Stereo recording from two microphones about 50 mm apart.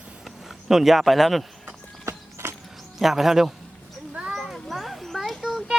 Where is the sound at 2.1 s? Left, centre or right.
Right.